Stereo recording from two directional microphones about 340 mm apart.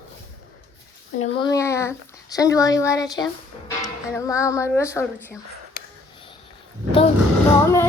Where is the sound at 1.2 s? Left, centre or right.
Centre.